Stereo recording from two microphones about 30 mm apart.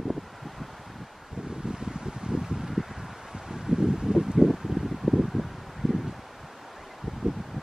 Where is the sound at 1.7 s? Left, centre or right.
Right.